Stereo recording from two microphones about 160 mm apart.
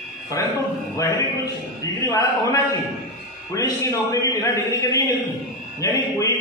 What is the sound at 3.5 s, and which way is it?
Speech, 20° left (ahead or behind).